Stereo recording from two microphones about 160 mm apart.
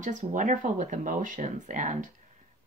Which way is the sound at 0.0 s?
50° right (ahead or behind).